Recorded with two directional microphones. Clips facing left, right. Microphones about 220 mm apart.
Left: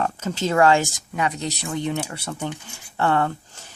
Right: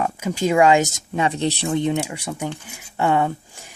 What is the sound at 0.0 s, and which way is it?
Speech, 10° right (ahead or behind).